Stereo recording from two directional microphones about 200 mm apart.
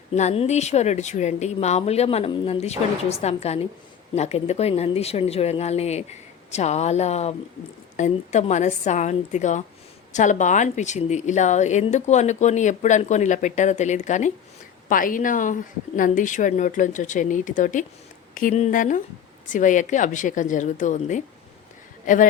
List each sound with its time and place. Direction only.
0.1 s a woman's voice: 35° left (ahead or behind)